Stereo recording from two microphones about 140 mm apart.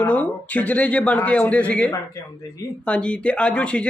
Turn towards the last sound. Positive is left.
turn(degrees=10)  # may be behind; listen again after turning